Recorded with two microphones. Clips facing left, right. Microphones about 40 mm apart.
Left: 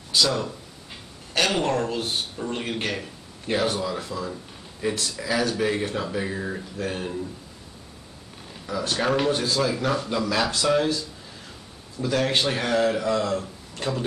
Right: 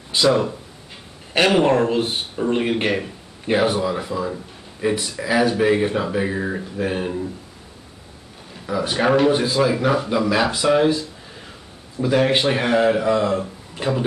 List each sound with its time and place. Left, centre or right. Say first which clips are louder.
0.1 s speech: right 6 dB; right
8.6 s speech: right 5 dB; centre